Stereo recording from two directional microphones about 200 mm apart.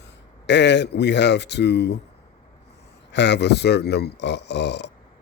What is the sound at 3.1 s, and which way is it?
Speech, 60° left (ahead or behind).